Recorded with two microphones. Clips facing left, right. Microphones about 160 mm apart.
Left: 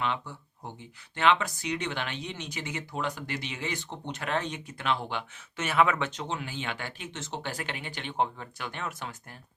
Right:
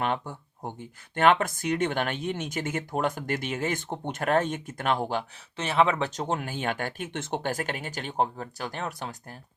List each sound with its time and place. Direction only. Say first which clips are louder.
0.0 s speech: right 3 dB; 50° right (ahead or behind)